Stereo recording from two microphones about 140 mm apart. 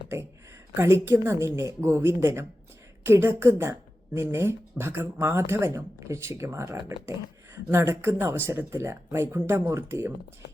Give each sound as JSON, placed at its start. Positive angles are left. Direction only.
{"t": 0.8, "sound": "speech", "side_deg": -20}